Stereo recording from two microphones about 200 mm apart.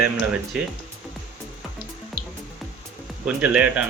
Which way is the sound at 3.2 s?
5° right (ahead or behind).